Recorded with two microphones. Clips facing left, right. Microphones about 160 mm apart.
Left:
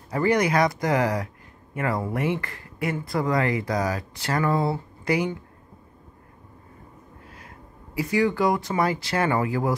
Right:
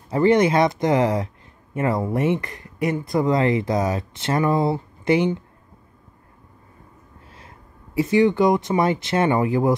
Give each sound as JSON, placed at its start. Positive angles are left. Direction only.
{"t": 0.1, "sound": "speech", "side_deg": -25}
{"t": 7.2, "sound": "speech", "side_deg": -25}